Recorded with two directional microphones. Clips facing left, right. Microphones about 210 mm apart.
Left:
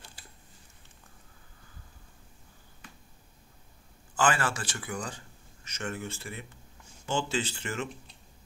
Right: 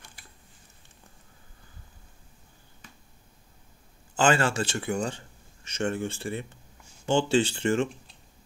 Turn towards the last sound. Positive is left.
turn(degrees=-30)  # may be behind; listen again after turning